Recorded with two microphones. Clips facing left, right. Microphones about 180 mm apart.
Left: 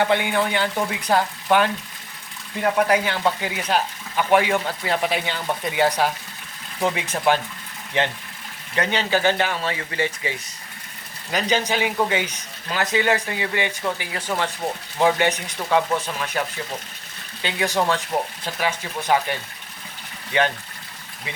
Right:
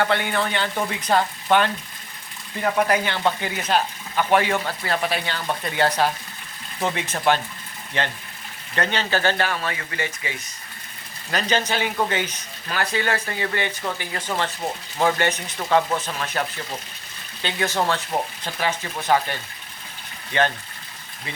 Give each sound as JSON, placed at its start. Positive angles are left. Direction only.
{"t": 0.0, "sound": "speech", "side_deg": 15}
{"t": 8.7, "sound": "speech", "side_deg": 10}
{"t": 11.3, "sound": "speech", "side_deg": 15}
{"t": 17.4, "sound": "speech", "side_deg": 10}
{"t": 20.3, "sound": "speech", "side_deg": 15}